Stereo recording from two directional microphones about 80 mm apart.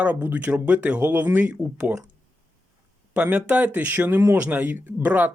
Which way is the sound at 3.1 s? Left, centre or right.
Centre.